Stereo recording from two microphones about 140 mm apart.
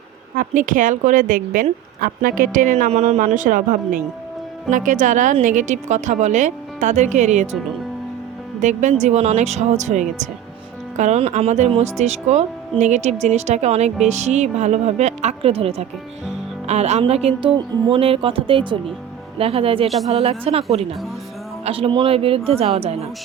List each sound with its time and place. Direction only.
0.3 s a woman's voice: 70° right (ahead or behind)
2.0 s a woman's voice: 90° right; by 7.6 s 55° right (ahead or behind)
8.6 s a woman's voice: 60° right (ahead or behind)